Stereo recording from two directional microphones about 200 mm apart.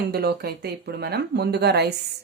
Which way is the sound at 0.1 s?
50° right (ahead or behind).